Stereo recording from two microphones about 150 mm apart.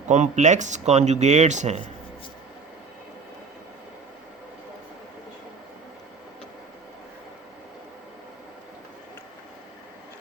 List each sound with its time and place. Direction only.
0.1 s speech: 50° right (ahead or behind)